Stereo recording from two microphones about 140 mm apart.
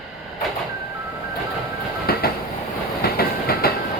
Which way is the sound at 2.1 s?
90° left.